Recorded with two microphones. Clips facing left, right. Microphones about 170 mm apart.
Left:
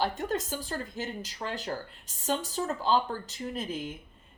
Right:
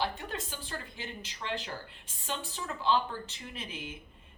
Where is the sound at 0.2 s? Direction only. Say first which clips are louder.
Left 8 dB; 40° left (ahead or behind).